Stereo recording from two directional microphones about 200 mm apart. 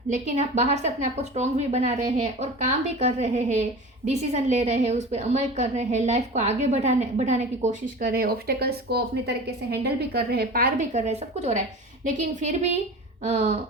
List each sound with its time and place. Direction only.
0.1 s a woman's voice: 35° right (ahead or behind)